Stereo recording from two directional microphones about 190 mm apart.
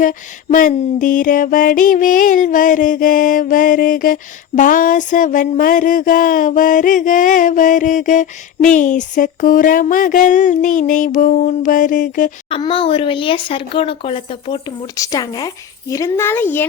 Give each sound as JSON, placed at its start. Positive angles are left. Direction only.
{"t": 0.0, "sound": "music", "side_deg": 45}
{"t": 12.5, "sound": "speech", "side_deg": 25}
{"t": 14.9, "sound": "speech", "side_deg": 20}